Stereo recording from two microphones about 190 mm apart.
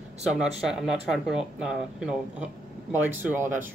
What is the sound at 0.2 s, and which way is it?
Speech, 5° right (ahead or behind).